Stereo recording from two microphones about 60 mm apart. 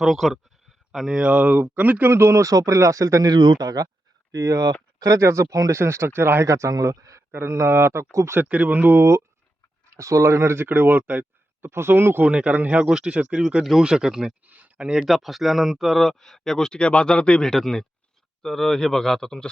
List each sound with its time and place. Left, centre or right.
0.0 s speech: centre
0.9 s speech: centre
2.0 s speech: right
4.3 s speech: right
5.7 s speech: right
6.4 s speech: right
7.3 s speech: right
8.4 s speech: right
9.9 s speech: right
12.2 s speech: right
14.4 s a sound: right
14.8 s speech: centre
16.0 s speech: centre
17.5 s speech: centre